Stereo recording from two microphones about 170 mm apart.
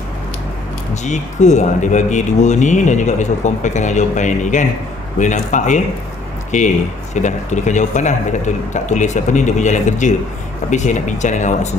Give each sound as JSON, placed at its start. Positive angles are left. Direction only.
{"t": 1.0, "sound": "speech", "side_deg": 45}